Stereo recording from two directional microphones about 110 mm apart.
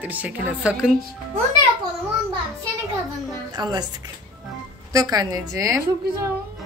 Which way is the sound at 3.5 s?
40° right (ahead or behind).